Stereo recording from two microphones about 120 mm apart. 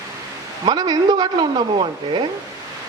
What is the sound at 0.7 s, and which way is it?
A man's voice, 35° right (ahead or behind).